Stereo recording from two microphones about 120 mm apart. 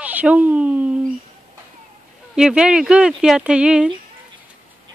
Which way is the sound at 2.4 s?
5° right (ahead or behind).